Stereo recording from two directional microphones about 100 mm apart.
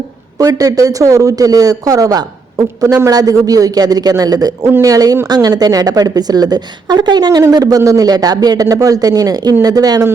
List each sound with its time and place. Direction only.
0.3 s a man's voice: 40° right (ahead or behind)